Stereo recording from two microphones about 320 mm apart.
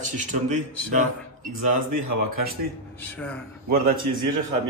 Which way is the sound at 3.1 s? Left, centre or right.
Centre.